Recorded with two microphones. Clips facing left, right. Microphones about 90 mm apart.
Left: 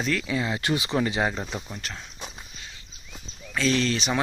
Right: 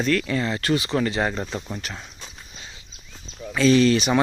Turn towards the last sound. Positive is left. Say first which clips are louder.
# right 7 dB
turn(degrees=-5)  # may be behind; listen again after turning